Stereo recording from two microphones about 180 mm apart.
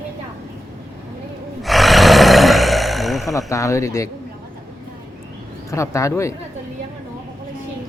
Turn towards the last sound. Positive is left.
turn(degrees=15)  # may be behind; listen again after turning